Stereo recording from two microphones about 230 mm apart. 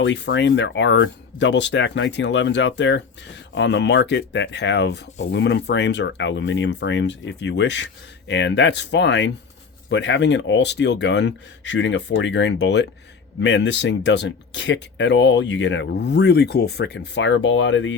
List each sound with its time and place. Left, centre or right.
0.0 s speech: left